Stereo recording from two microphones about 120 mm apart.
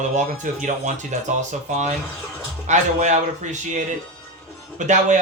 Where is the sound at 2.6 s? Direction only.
85° right.